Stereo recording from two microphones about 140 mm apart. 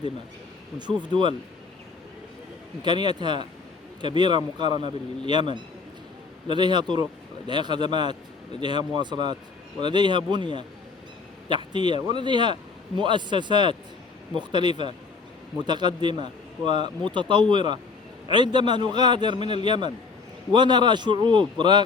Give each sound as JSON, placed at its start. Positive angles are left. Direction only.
{"t": 0.8, "sound": "speech", "side_deg": -35}
{"t": 2.8, "sound": "speech", "side_deg": -35}